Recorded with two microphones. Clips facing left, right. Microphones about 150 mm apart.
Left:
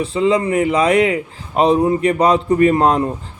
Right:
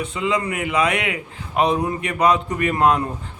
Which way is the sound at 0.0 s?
30° left (ahead or behind).